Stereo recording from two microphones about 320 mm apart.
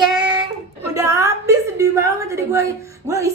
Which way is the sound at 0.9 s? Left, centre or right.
Centre.